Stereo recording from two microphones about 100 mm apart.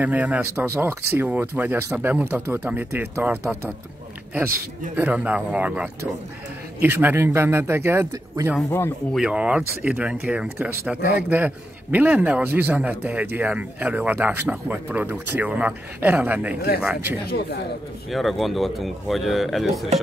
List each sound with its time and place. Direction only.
0.0 s speech: 15° right (ahead or behind)
4.9 s speech: 15° right (ahead or behind)
8.6 s speech: 25° left (ahead or behind)
9.1 s speech: 10° right (ahead or behind)
18.1 s speech: centre (ahead or behind)